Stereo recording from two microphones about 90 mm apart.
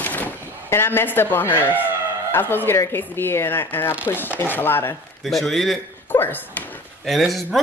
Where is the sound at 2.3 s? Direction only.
25° left (ahead or behind).